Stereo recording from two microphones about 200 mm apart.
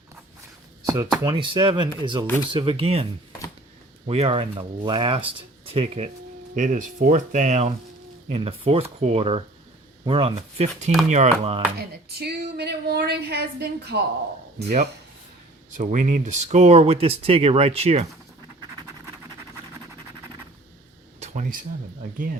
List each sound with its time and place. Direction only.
0.9 s speech: 15° right (ahead or behind)
2.2 s speech: 10° left (ahead or behind)
2.5 s speech: 25° right (ahead or behind)
11.8 s a sound: 55° right (ahead or behind)
15.7 s speech: 40° right (ahead or behind)
21.2 s a sound: 35° right (ahead or behind)